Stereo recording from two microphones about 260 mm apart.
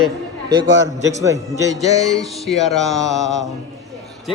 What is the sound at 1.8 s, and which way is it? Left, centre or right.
Music, left.